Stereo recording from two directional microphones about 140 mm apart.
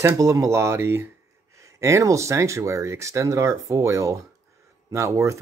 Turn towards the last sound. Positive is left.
turn(degrees=-20)  # may be behind; listen again after turning